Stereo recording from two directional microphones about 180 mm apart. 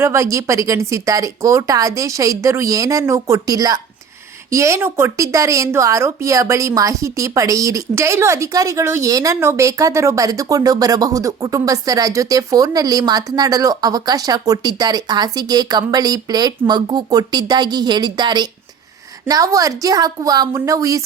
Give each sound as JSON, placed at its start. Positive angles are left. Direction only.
{"t": 0.0, "sound": "a woman's voice", "side_deg": -15}